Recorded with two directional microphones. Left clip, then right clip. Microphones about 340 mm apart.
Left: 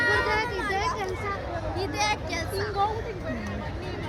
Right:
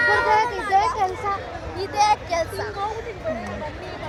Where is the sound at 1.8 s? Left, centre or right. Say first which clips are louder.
Right 9 dB; centre.